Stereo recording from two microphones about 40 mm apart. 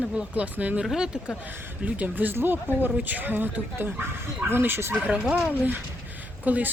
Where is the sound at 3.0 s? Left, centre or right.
Right.